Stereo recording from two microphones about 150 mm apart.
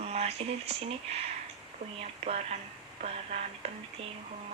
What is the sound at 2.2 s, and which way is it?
Speech, 45° right (ahead or behind).